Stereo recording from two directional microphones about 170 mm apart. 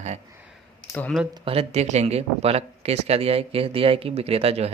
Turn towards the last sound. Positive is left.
turn(degrees=-35)  # may be behind; listen again after turning